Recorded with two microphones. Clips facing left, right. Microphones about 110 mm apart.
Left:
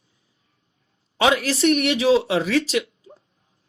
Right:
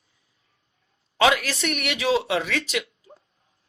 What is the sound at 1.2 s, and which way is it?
Speech, 30° left (ahead or behind).